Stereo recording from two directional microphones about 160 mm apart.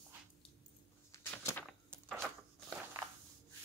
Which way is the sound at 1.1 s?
15° left (ahead or behind).